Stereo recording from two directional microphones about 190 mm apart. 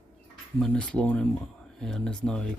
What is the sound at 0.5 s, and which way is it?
Speech, 5° left (ahead or behind).